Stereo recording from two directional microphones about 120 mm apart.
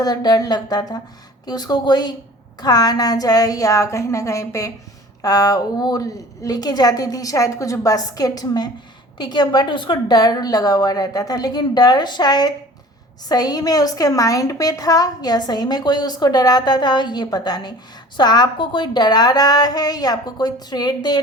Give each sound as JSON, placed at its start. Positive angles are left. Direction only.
{"t": 0.0, "sound": "a woman's voice", "side_deg": 35}